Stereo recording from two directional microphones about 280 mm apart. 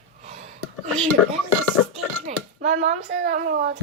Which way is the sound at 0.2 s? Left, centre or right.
Right.